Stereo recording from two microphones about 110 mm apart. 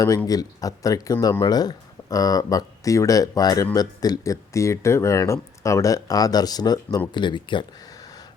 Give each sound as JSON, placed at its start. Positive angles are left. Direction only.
{"t": 0.3, "sound": "speech", "side_deg": 35}